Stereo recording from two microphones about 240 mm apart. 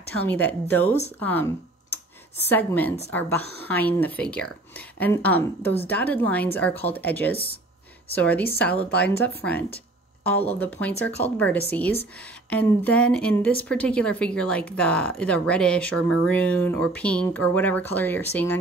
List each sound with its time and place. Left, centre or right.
0.3 s speech: centre
1.2 s tick-tock: centre
2.5 s a woman's voice: centre
10.6 s a woman's voice: centre